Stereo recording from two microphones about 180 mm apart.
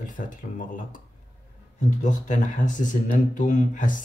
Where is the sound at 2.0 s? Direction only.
45° left (ahead or behind).